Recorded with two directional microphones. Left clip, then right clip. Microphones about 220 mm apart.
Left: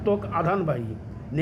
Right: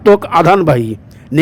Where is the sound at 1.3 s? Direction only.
35° right (ahead or behind).